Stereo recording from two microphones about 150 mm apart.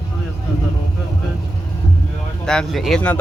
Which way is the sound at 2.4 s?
5° left (ahead or behind).